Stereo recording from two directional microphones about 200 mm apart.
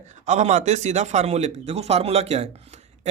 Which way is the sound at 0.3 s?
35° right (ahead or behind).